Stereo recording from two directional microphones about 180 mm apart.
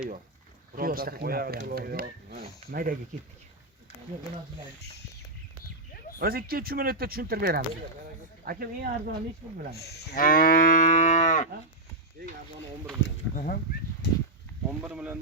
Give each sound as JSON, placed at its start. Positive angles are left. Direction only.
{"t": 0.8, "sound": "speech", "side_deg": -55}
{"t": 6.1, "sound": "speech", "side_deg": -55}
{"t": 9.7, "sound": "moo", "side_deg": 65}
{"t": 14.0, "sound": "speech", "side_deg": 65}
{"t": 14.7, "sound": "speech", "side_deg": -5}